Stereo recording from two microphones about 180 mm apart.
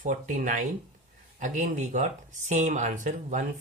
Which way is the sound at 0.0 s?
45° right (ahead or behind).